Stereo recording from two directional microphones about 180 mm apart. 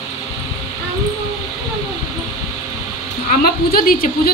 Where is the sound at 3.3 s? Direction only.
55° left (ahead or behind).